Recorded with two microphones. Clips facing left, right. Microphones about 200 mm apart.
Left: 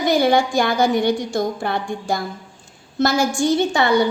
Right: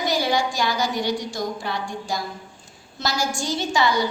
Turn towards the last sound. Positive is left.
turn(degrees=60)  # may be behind; listen again after turning